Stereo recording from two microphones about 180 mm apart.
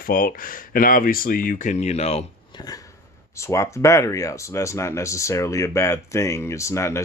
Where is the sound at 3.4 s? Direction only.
15° left (ahead or behind).